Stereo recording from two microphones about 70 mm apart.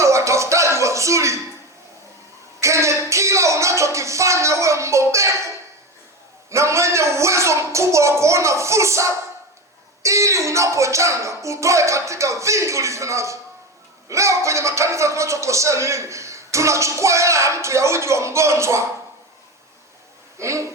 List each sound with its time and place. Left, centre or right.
0.0 s music: right
2.6 s music: right
6.5 s a sound: right
10.0 s speech: right
20.4 s speech: right